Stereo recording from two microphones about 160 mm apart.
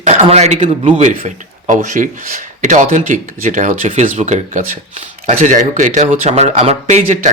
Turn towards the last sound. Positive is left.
turn(degrees=-45)  # may be behind; listen again after turning